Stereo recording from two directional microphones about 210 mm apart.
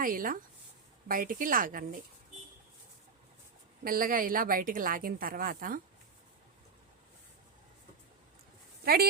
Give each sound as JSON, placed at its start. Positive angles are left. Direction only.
{"t": 0.0, "sound": "a woman's voice", "side_deg": -40}
{"t": 3.8, "sound": "a woman's voice", "side_deg": -45}
{"t": 8.8, "sound": "speech", "side_deg": -45}